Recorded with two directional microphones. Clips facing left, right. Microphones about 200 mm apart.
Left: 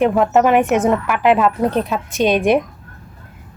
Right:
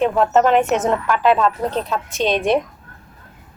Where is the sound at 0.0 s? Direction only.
10° left (ahead or behind).